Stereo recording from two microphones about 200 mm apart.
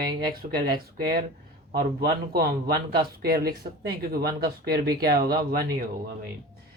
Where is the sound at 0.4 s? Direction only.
50° right (ahead or behind).